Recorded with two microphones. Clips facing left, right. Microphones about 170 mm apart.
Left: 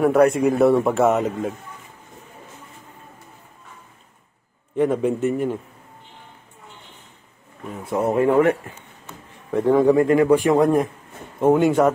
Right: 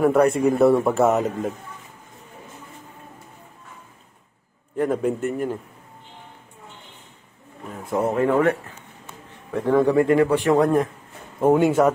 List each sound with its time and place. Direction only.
0.0 s a man's voice: centre (ahead or behind)
4.7 s a man's voice: centre (ahead or behind)
7.8 s a man's voice: centre (ahead or behind)
8.2 s speech: 15° left (ahead or behind)
9.7 s a man's voice: 15° left (ahead or behind)
10.3 s speech: 10° left (ahead or behind)
11.3 s a man's voice: 5° right (ahead or behind)